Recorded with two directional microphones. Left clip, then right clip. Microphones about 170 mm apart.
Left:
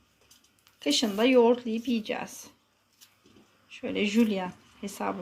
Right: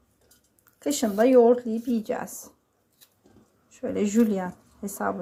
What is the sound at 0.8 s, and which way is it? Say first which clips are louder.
Speech: right 3 dB; 30° right (ahead or behind).